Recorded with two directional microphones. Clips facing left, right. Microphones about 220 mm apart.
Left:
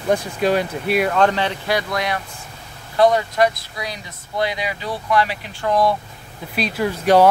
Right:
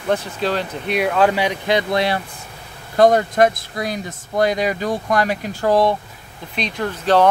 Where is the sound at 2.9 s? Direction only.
45° right (ahead or behind).